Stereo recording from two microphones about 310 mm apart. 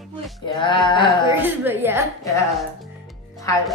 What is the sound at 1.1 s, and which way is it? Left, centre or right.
Speech, centre.